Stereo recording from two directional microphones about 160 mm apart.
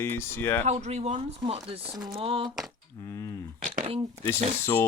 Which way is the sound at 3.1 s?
20° left (ahead or behind).